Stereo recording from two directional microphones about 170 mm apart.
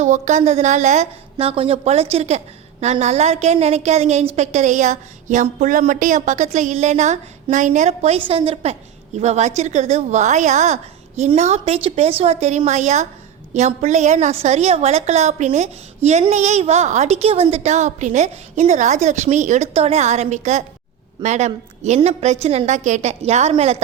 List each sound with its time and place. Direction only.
0.0 s a woman's voice: 45° right (ahead or behind)